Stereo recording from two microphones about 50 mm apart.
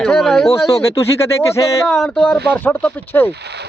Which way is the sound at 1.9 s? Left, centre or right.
Centre.